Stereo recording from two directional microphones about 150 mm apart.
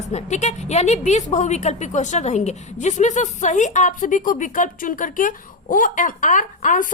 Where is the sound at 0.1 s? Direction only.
50° left (ahead or behind).